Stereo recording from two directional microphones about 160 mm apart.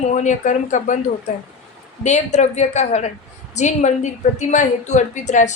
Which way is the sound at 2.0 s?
45° left (ahead or behind).